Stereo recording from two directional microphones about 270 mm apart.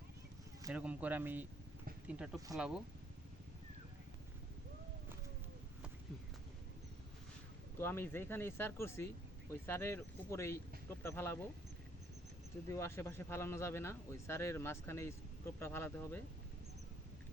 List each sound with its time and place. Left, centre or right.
0.6 s speech: centre
7.8 s speech: centre
12.7 s speech: centre